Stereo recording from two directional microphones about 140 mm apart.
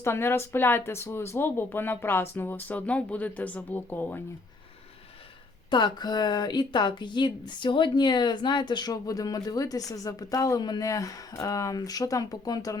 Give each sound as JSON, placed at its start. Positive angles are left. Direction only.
{"t": 0.0, "sound": "speech", "side_deg": 15}
{"t": 5.7, "sound": "speech", "side_deg": 30}